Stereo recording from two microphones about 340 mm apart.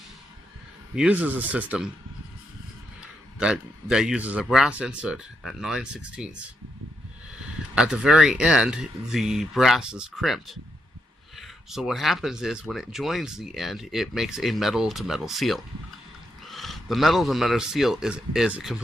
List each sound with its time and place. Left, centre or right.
0.9 s speech: centre
3.3 s speech: centre
7.8 s speech: centre